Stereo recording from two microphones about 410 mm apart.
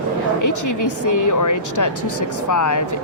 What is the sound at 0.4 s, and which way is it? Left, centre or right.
Speech, left.